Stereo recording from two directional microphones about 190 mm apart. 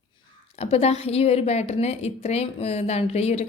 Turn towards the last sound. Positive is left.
turn(degrees=35)  # may be behind; listen again after turning